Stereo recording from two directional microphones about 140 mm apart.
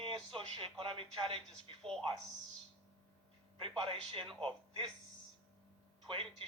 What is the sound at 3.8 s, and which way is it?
Speech, 40° right (ahead or behind).